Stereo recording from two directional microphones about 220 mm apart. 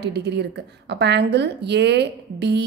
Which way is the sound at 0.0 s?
50° right (ahead or behind).